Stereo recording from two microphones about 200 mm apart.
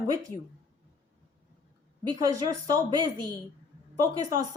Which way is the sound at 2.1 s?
15° right (ahead or behind).